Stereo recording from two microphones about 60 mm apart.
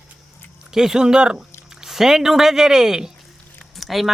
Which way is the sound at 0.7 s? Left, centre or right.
Centre.